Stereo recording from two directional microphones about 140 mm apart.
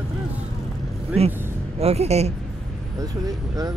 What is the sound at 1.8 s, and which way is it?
Speech, 50° right (ahead or behind).